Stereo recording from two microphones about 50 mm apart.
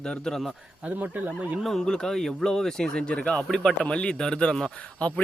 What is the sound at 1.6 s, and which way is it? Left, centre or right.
Speech, centre.